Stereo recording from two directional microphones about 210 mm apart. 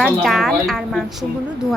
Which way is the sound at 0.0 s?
Centre (ahead or behind).